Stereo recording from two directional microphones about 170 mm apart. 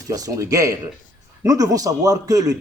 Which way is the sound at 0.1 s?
20° right (ahead or behind).